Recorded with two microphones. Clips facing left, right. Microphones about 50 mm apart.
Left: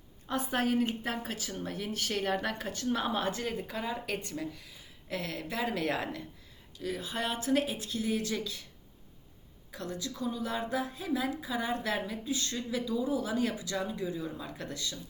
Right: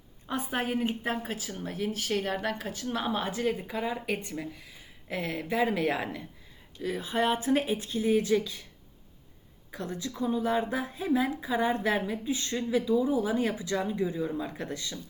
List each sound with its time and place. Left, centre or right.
0.3 s speech: centre
6.7 s speech: right
9.7 s speech: right